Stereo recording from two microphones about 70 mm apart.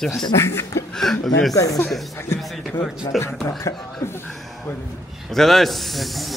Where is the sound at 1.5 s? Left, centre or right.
Left.